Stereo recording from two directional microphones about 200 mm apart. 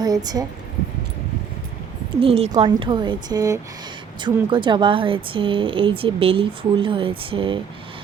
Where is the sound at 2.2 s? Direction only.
30° right (ahead or behind).